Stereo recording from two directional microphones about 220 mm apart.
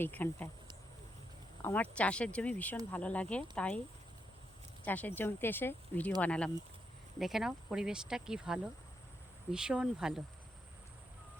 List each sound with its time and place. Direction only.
0.0 s speech: 10° left (ahead or behind)
1.6 s speech: 5° left (ahead or behind)
4.9 s speech: 10° left (ahead or behind)